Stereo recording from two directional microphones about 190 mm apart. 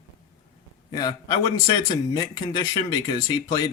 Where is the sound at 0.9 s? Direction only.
25° left (ahead or behind).